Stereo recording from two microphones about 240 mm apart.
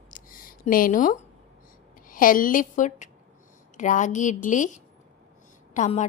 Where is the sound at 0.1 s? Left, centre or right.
Left.